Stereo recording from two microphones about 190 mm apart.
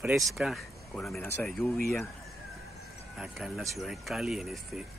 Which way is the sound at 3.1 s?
Centre (ahead or behind).